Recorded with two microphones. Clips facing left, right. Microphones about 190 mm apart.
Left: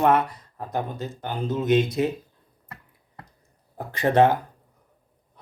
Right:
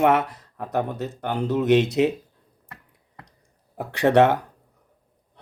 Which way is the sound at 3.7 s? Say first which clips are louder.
Right 3 dB; 75° right (ahead or behind).